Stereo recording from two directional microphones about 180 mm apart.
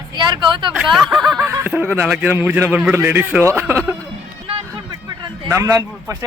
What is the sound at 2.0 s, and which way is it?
A man's voice, 5° right (ahead or behind).